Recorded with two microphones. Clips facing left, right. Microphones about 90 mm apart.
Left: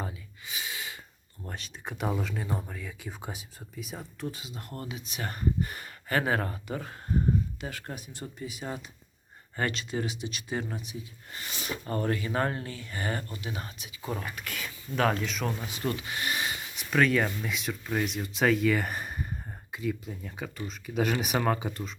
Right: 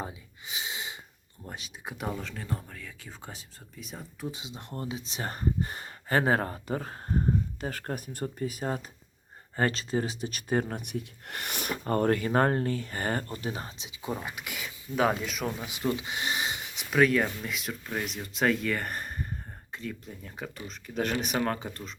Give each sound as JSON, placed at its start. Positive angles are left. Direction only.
{"t": 0.0, "sound": "gasp", "side_deg": -20}
{"t": 1.5, "sound": "speech", "side_deg": -10}
{"t": 2.0, "sound": "speech", "side_deg": 10}
{"t": 4.3, "sound": "speech", "side_deg": -20}
{"t": 15.6, "sound": "speech", "side_deg": -15}
{"t": 16.9, "sound": "speech", "side_deg": -5}